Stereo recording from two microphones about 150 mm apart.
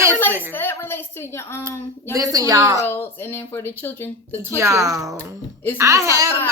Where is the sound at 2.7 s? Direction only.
15° left (ahead or behind).